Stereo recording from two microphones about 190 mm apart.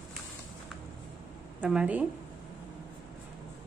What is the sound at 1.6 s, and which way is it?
Speech, 5° right (ahead or behind).